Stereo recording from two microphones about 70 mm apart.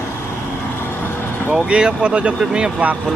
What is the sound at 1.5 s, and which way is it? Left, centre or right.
Speech, centre.